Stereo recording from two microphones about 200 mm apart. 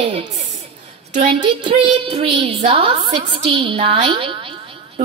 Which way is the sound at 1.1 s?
35° right (ahead or behind).